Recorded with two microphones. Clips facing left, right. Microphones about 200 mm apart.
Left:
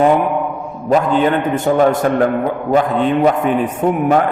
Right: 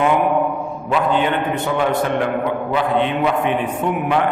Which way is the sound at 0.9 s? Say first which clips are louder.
Left 5 dB; 40° left (ahead or behind).